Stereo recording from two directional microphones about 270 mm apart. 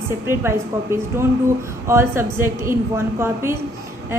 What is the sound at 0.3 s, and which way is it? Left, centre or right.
A woman's voice, centre.